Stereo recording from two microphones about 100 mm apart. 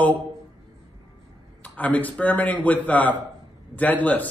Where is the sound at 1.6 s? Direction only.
15° left (ahead or behind).